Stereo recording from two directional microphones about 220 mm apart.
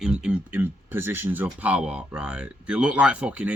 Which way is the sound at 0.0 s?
5° right (ahead or behind).